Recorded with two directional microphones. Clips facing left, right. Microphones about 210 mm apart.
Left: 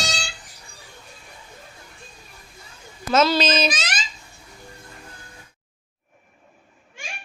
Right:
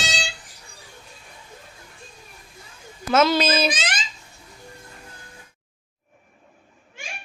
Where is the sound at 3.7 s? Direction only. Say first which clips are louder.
Right 1 dB; 30° right (ahead or behind).